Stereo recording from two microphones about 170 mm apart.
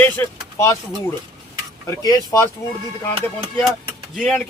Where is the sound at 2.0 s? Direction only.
20° left (ahead or behind).